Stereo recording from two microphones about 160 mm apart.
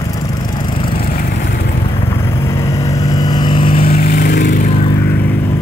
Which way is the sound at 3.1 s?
25° left (ahead or behind).